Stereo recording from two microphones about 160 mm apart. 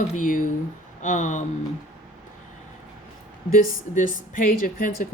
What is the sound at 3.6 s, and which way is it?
Speech, 55° left (ahead or behind).